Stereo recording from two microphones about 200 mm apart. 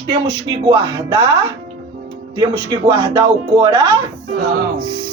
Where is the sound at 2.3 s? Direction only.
20° right (ahead or behind).